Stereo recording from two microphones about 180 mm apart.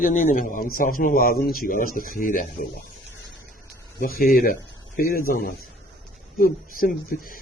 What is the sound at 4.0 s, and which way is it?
A man's voice, 55° left (ahead or behind).